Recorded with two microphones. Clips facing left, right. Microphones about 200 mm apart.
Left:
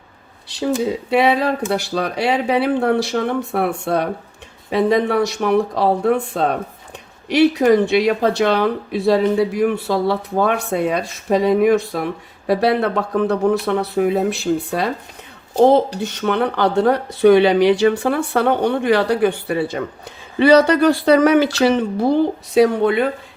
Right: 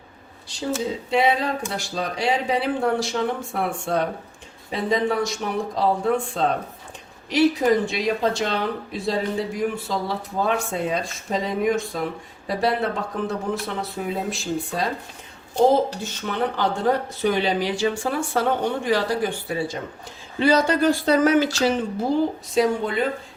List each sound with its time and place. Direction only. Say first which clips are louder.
0.5 s speech: left 6 dB; 65° left (ahead or behind)